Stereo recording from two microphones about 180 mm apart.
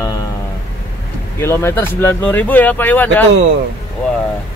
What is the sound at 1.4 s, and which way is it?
Speech, 15° left (ahead or behind).